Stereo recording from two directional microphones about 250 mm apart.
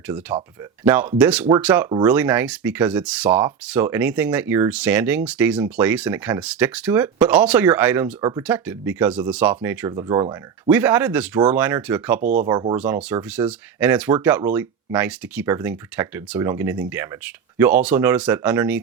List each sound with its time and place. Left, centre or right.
0.9 s speech: centre
12.2 s speech: right
12.5 s speech: centre
12.7 s speech: centre